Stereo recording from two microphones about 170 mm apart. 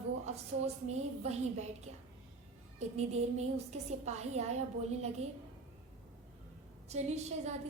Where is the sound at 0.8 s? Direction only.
40° right (ahead or behind).